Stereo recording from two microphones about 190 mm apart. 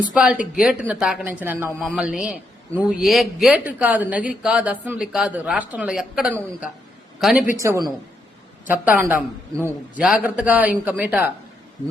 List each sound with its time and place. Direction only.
0.0 s a woman's voice: 5° right (ahead or behind)
7.5 s a woman's voice: 15° right (ahead or behind)